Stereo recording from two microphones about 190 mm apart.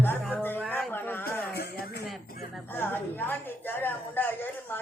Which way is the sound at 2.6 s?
10° left (ahead or behind).